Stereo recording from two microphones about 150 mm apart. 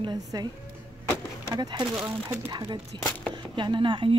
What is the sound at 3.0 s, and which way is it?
Speech, 10° left (ahead or behind).